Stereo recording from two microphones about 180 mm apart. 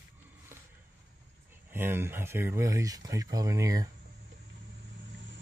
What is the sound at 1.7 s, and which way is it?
Speech, 10° right (ahead or behind).